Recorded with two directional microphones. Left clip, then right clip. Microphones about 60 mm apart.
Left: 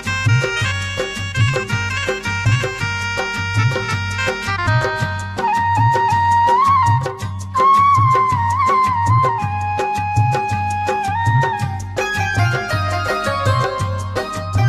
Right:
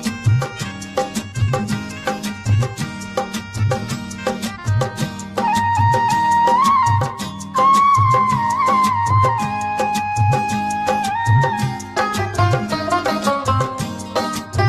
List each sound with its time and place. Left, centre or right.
4.2 s music: left